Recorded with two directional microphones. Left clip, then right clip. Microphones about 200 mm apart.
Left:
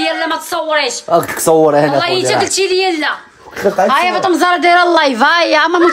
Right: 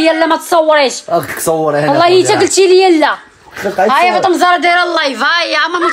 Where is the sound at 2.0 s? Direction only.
20° right (ahead or behind).